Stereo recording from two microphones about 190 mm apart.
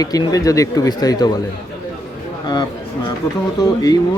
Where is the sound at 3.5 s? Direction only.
20° left (ahead or behind).